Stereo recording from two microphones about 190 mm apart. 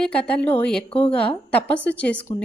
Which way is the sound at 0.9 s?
30° left (ahead or behind).